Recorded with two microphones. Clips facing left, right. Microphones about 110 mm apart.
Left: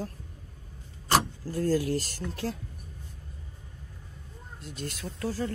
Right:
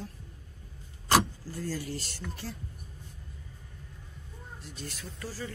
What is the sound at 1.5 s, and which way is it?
Speech, 50° left (ahead or behind).